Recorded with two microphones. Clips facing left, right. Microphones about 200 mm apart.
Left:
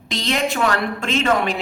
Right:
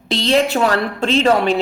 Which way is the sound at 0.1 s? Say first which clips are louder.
Right 6 dB; 30° right (ahead or behind).